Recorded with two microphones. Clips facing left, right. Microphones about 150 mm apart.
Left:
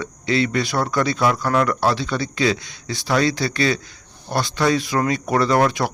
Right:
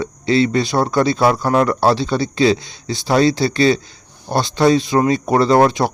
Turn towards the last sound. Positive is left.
turn(degrees=-25)  # may be behind; listen again after turning